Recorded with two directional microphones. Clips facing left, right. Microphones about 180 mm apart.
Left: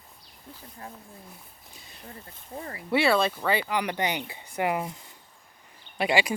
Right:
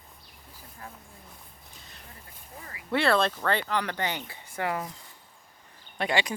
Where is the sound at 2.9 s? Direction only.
5° left (ahead or behind).